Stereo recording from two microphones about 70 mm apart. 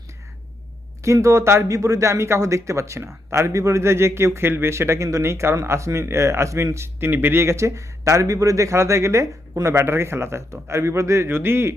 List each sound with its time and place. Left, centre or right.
1.0 s speech: right